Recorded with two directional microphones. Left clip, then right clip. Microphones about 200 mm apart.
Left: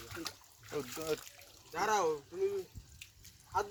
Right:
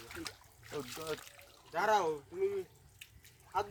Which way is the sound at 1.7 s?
10° right (ahead or behind).